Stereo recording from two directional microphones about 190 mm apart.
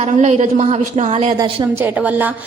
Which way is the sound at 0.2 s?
40° right (ahead or behind).